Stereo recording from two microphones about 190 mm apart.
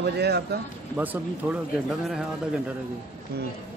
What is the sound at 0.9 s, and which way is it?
Speech, 10° right (ahead or behind).